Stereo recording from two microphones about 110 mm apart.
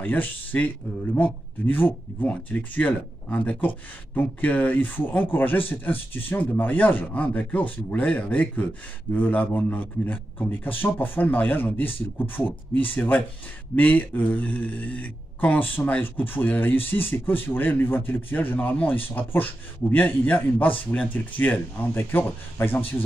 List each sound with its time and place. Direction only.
0.0 s speech: 15° left (ahead or behind)